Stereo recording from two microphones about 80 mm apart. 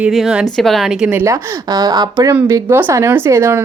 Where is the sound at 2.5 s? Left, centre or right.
Right.